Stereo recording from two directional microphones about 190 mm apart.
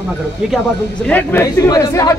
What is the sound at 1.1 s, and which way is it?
Speech, 10° left (ahead or behind).